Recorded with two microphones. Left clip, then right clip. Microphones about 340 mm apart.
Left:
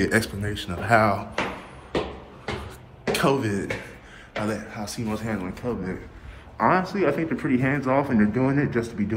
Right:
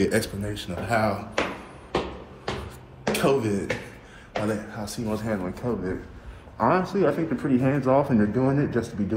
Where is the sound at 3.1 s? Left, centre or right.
Centre.